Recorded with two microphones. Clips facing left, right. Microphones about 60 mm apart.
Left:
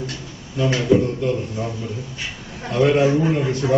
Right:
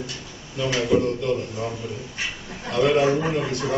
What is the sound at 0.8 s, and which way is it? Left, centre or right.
Speech, centre.